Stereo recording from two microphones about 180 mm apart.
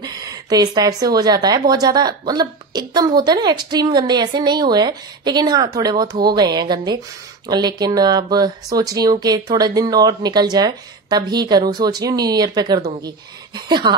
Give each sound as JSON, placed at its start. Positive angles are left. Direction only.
{"t": 0.0, "sound": "a woman's voice", "side_deg": -20}